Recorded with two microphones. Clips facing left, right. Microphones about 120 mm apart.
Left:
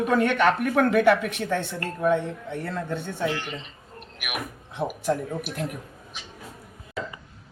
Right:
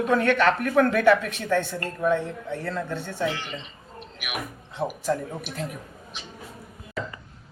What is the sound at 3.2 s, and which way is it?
Speech, centre (ahead or behind).